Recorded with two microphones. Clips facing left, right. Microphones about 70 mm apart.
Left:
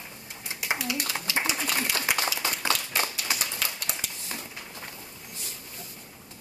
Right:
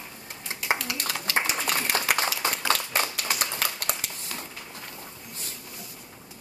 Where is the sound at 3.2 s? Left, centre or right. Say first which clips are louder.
Right 3 dB; right.